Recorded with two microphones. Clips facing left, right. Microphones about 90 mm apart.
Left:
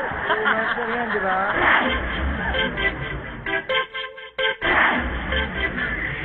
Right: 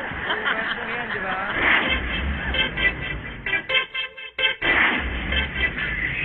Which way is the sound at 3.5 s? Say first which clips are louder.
Left 3 dB; 25° left (ahead or behind).